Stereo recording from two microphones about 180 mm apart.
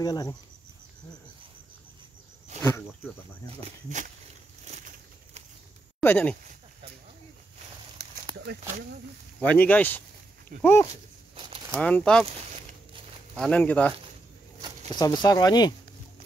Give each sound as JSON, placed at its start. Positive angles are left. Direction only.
{"t": 0.0, "sound": "speech", "side_deg": 20}
{"t": 3.6, "sound": "speech", "side_deg": -45}
{"t": 4.6, "sound": "a sound", "side_deg": -40}
{"t": 5.9, "sound": "speech", "side_deg": 10}
{"t": 9.4, "sound": "speech", "side_deg": 10}
{"t": 11.3, "sound": "a sound", "side_deg": -30}
{"t": 11.7, "sound": "speech", "side_deg": 5}
{"t": 13.4, "sound": "speech", "side_deg": 5}
{"t": 15.0, "sound": "speech", "side_deg": 20}